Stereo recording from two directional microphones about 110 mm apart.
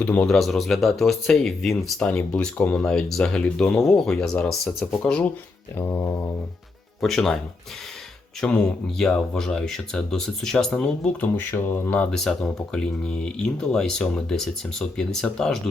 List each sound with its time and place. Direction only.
0.0 s speech: 10° left (ahead or behind)
5.7 s mantra: 25° left (ahead or behind)
7.0 s speech: 5° left (ahead or behind)
8.4 s speech: 5° left (ahead or behind)
12.1 s speech: 5° left (ahead or behind)